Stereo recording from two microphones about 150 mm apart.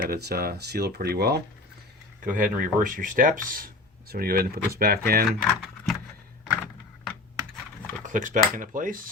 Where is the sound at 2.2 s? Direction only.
65° right (ahead or behind).